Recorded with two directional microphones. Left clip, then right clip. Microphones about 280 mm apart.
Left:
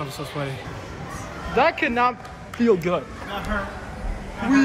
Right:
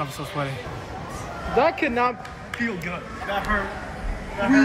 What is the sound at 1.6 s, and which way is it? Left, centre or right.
Speech, centre.